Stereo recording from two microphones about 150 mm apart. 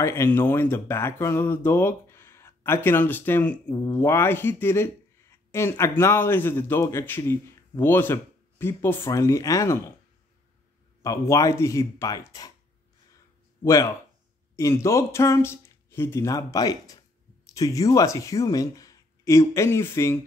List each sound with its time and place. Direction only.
0.0 s speech: 15° left (ahead or behind)
11.0 s speech: 20° left (ahead or behind)
13.7 s speech: 20° left (ahead or behind)